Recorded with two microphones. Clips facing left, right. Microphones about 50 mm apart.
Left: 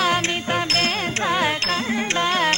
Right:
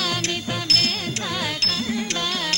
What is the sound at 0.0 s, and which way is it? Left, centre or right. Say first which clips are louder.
Music: left 5 dB; left.